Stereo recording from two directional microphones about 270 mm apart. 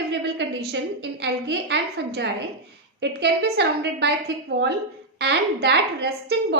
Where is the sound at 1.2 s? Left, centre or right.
Right.